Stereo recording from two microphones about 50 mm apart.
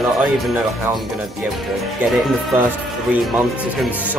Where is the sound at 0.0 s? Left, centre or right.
Centre.